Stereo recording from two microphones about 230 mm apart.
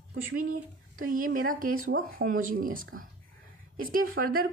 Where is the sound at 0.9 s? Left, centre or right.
Right.